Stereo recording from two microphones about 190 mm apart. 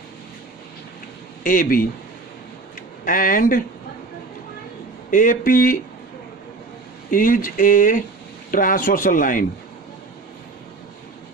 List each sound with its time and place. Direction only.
1.4 s speech: 45° left (ahead or behind)
3.1 s speech: 45° left (ahead or behind)
5.1 s speech: 45° left (ahead or behind)
7.1 s speech: 45° left (ahead or behind)